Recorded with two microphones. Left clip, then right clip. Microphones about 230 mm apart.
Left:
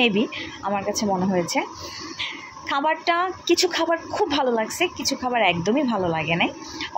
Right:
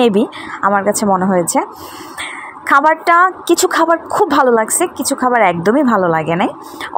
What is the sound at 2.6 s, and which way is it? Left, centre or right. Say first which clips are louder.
Speech: right 11 dB; right.